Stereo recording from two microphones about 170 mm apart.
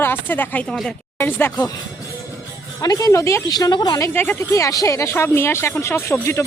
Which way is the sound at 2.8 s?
20° left (ahead or behind).